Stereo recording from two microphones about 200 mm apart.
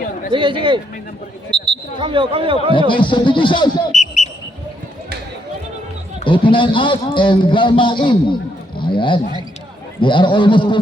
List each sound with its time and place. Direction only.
0.3 s speech: 25° right (ahead or behind)
2.7 s a man's voice: 25° left (ahead or behind)
4.0 s basketball bounce: 35° left (ahead or behind)
6.2 s a man's voice: 25° left (ahead or behind)